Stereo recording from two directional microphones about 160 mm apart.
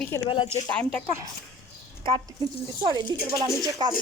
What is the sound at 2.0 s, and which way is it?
A woman's voice, 35° right (ahead or behind).